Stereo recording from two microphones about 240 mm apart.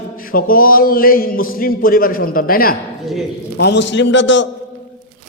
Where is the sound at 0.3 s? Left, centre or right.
Left.